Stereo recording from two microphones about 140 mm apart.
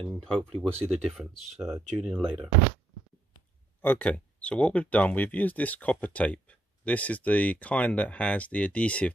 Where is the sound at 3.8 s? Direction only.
10° left (ahead or behind).